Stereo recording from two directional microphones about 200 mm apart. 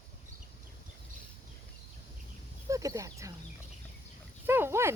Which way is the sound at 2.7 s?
15° right (ahead or behind).